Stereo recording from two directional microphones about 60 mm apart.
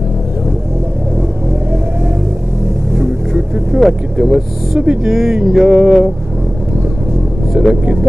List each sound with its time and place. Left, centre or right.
3.7 s vehicle: centre
4.2 s speech: centre
5.1 s a sound: centre
7.5 s vehicle: right